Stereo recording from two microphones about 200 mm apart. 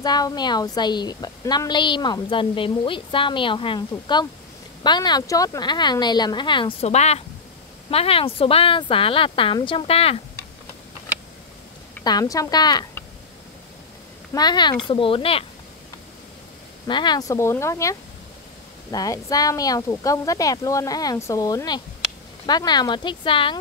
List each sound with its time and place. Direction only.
0.0 s a woman's voice: 20° left (ahead or behind)
12.0 s a woman's voice: 20° left (ahead or behind)
14.3 s a woman's voice: 20° left (ahead or behind)
16.8 s a woman's voice: 20° left (ahead or behind)